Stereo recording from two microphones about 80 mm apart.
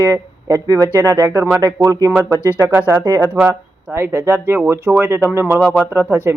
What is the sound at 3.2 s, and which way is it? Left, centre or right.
Speech, right.